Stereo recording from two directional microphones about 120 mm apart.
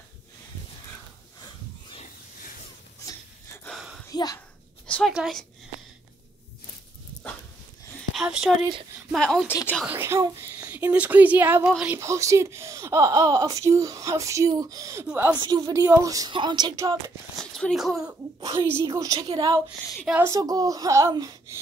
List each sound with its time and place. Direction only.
3.7 s a sound: 5° right (ahead or behind)
4.1 s a sound: 30° left (ahead or behind)
4.8 s a sound: 10° left (ahead or behind)
5.1 s a woman's voice: 5° right (ahead or behind)
8.1 s a woman's voice: 5° right (ahead or behind)
9.8 s speech: 20° right (ahead or behind)
12.0 s speech: 25° right (ahead or behind)
15.7 s speech: 25° right (ahead or behind)
16.3 s speech: 40° right (ahead or behind)
17.4 s speech: 5° left (ahead or behind)
18.4 s speech: 30° right (ahead or behind)
19.1 s speech: 40° right (ahead or behind)